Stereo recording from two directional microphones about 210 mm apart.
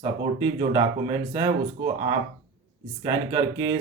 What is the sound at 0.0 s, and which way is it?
Speech, 20° right (ahead or behind).